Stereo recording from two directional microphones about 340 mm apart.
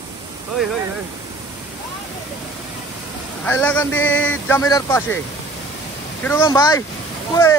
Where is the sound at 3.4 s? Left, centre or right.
Centre.